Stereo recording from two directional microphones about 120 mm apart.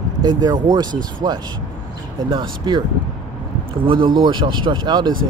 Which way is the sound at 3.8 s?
40° right (ahead or behind).